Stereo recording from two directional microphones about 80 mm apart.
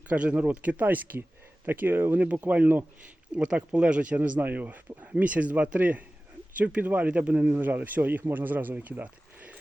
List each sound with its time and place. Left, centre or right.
0.1 s speech: centre